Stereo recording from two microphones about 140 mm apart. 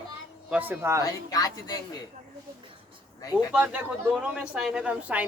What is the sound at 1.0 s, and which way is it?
Speech, 25° left (ahead or behind).